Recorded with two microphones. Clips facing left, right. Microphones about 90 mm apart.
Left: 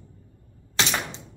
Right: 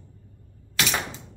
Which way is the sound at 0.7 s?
30° left (ahead or behind).